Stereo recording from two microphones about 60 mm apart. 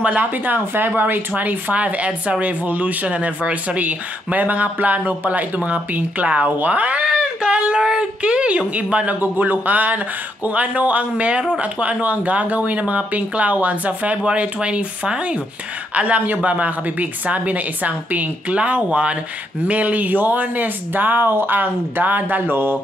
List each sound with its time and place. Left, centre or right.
0.0 s speech: right